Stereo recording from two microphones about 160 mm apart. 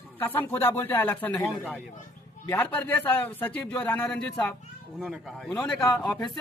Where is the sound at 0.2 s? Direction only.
10° left (ahead or behind).